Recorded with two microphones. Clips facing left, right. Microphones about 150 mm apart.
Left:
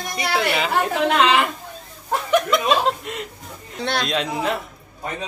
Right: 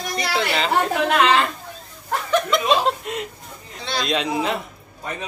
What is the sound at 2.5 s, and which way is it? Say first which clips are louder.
Speech: even; centre (ahead or behind).